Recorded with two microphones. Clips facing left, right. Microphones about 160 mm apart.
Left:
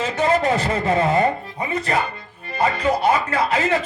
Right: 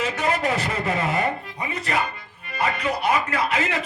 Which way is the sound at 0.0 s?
30° left (ahead or behind).